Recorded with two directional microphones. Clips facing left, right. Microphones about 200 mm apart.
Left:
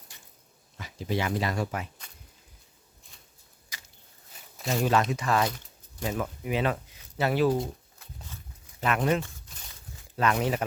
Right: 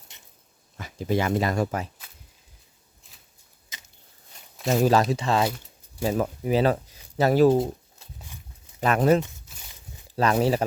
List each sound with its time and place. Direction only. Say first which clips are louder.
0.1 s dog: right 1 dB; 20° right (ahead or behind)
0.8 s speech: right 5 dB; 50° right (ahead or behind)
3.7 s a sound: even; 20° right (ahead or behind)
4.5 s speech: right 6 dB; centre (ahead or behind)
5.1 s speech: right 3 dB; 25° right (ahead or behind)
7.5 s pigeon: right 6 dB; 25° right (ahead or behind)
8.8 s speech: right 6 dB; 40° right (ahead or behind)